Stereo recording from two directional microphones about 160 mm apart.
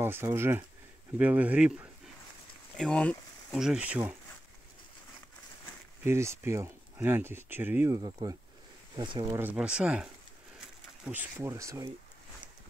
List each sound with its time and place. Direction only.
0.0 s speech: 15° right (ahead or behind)
2.8 s speech: 5° left (ahead or behind)
3.5 s speech: 5° right (ahead or behind)
6.0 s speech: 15° right (ahead or behind)
8.0 s speech: 30° right (ahead or behind)
9.3 s speech: 10° right (ahead or behind)
11.1 s speech: 10° right (ahead or behind)